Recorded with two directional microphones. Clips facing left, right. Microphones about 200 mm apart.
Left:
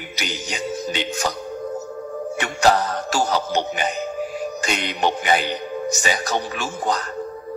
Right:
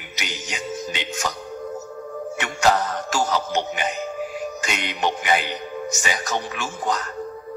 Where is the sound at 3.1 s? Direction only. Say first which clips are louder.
Left 2 dB; 35° left (ahead or behind).